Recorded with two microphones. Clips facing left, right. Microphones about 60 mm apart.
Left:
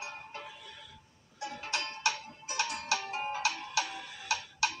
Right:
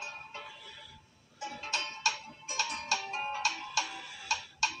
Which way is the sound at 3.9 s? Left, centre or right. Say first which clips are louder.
Left 1 dB; centre.